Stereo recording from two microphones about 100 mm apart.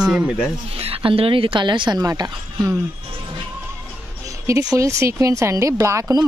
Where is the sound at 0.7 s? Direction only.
75° right (ahead or behind); by 2.3 s 40° right (ahead or behind).